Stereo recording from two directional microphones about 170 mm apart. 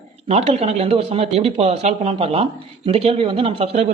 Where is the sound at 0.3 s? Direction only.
40° right (ahead or behind).